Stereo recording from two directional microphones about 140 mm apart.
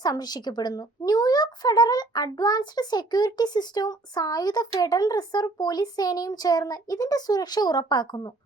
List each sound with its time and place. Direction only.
0.0 s speech: 30° left (ahead or behind)